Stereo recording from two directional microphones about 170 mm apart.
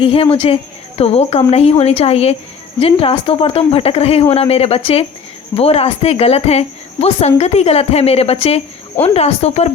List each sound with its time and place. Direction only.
0.0 s speech: 35° left (ahead or behind)